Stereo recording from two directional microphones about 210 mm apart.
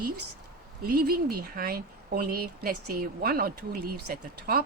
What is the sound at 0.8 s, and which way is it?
Speech, 45° right (ahead or behind).